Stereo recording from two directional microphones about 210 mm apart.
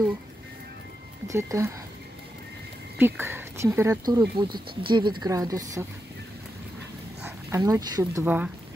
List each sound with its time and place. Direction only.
1.2 s speech: 15° right (ahead or behind)
3.0 s speech: 10° right (ahead or behind)
7.2 s speech: 15° right (ahead or behind)